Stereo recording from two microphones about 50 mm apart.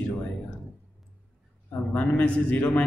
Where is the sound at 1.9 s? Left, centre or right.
Left.